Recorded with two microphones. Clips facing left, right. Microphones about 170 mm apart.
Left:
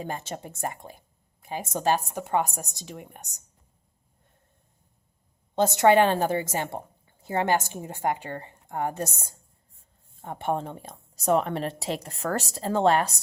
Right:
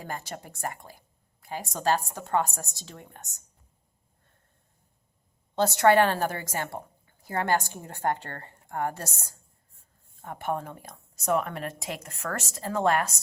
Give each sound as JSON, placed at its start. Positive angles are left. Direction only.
{"t": 0.0, "sound": "speech", "side_deg": 20}
{"t": 5.5, "sound": "a woman's voice", "side_deg": 20}